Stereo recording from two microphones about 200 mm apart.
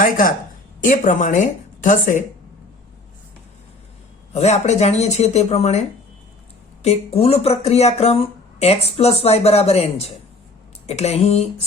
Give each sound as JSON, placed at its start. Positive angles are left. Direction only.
{"t": 0.0, "sound": "speech", "side_deg": 45}
{"t": 4.3, "sound": "speech", "side_deg": 35}
{"t": 6.8, "sound": "speech", "side_deg": 30}